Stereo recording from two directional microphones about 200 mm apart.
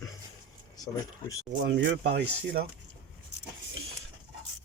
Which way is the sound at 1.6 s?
60° right (ahead or behind).